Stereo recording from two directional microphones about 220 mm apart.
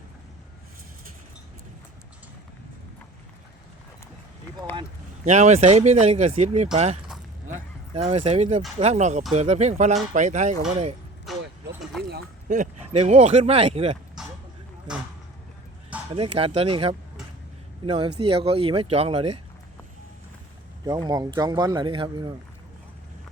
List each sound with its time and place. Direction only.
5.2 s speech: 30° right (ahead or behind)
7.4 s bow-wow: 30° right (ahead or behind)
8.8 s speech: 30° right (ahead or behind)
11.3 s vehicle: centre (ahead or behind)
12.1 s speech: 35° right (ahead or behind)
16.1 s speech: 25° right (ahead or behind)
20.8 s speech: 15° right (ahead or behind)